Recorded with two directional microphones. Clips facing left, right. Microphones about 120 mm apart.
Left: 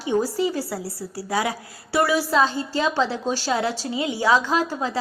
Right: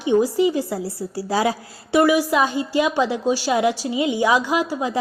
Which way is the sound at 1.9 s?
15° right (ahead or behind).